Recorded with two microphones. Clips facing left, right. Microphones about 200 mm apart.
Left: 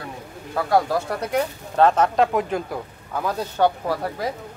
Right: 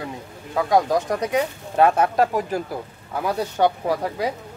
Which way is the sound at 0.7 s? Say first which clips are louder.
Right 1 dB; 15° right (ahead or behind).